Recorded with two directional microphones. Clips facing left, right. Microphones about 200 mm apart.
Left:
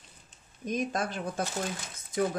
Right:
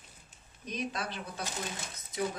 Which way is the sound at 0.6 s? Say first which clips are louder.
Left 6 dB; 45° left (ahead or behind).